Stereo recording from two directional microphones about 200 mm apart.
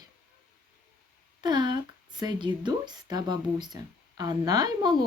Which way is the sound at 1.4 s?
20° right (ahead or behind).